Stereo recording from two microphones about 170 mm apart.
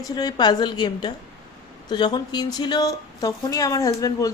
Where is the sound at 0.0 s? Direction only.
25° left (ahead or behind).